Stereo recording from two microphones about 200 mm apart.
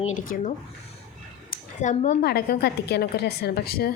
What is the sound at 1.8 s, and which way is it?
Speech, 40° left (ahead or behind).